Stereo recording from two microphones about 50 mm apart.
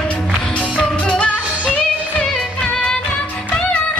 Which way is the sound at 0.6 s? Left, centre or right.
Left.